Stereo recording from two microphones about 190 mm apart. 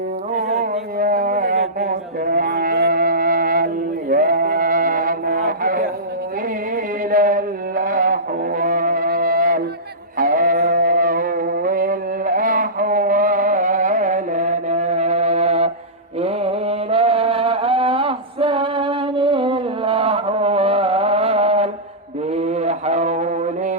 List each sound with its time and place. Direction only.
0.3 s a sound: 40° right (ahead or behind)
4.1 s sheep: 50° right (ahead or behind)
7.1 s music: 45° right (ahead or behind)
10.2 s sheep: 45° right (ahead or behind)
16.2 s mantra: 30° right (ahead or behind)